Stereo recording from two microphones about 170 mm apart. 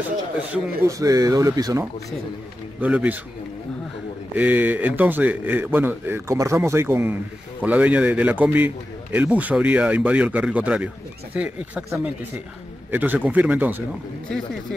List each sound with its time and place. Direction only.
0.4 s speech: 15° right (ahead or behind)
2.8 s a man's voice: 10° right (ahead or behind)
4.4 s a man's voice: 10° right (ahead or behind)